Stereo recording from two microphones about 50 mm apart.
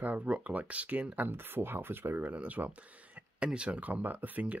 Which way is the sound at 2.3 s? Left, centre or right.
Right.